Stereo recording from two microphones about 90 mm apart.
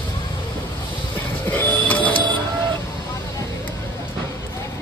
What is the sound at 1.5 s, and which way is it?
Vehicle, 20° left (ahead or behind).